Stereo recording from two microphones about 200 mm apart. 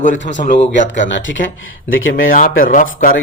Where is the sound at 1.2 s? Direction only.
75° left (ahead or behind).